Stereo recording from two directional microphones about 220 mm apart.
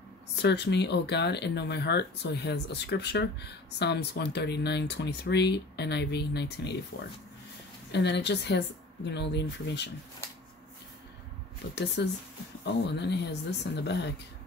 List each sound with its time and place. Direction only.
0.4 s speech: 50° left (ahead or behind)
11.7 s speech: 50° left (ahead or behind)